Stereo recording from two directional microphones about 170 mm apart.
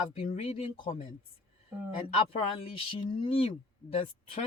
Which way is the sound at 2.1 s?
35° left (ahead or behind).